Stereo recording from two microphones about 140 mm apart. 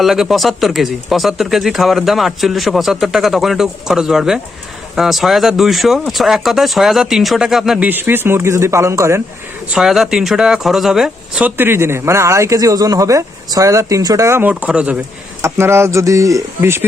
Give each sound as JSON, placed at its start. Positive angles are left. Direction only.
{"t": 0.0, "sound": "speech", "side_deg": 0}
{"t": 9.7, "sound": "speech", "side_deg": 0}
{"t": 14.5, "sound": "speech", "side_deg": -5}
{"t": 15.4, "sound": "speech", "side_deg": -20}